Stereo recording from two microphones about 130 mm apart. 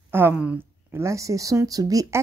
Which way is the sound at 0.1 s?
15° right (ahead or behind).